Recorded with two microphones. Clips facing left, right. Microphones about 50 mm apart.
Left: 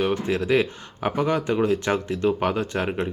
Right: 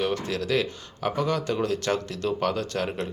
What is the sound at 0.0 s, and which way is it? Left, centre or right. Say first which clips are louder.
Speech: left 4 dB; left.